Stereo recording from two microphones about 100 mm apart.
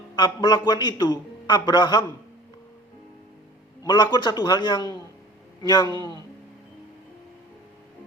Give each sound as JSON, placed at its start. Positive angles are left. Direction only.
{"t": 0.2, "sound": "a man's voice", "side_deg": 45}
{"t": 3.8, "sound": "a man's voice", "side_deg": 50}